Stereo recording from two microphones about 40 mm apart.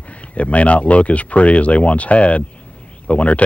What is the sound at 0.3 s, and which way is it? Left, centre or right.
Speech, left.